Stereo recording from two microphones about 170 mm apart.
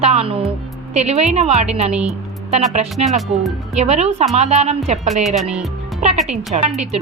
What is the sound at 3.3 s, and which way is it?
A woman's voice, 40° right (ahead or behind).